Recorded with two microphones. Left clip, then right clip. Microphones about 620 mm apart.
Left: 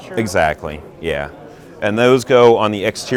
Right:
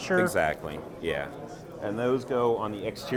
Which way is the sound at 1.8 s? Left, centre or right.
Left.